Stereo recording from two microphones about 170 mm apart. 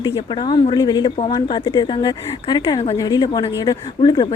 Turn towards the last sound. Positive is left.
turn(degrees=25)  # may be behind; listen again after turning